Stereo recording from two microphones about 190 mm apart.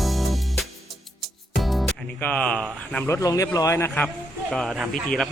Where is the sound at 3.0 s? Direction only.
15° left (ahead or behind).